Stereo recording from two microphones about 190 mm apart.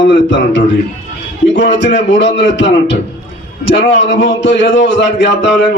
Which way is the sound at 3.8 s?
70° left (ahead or behind).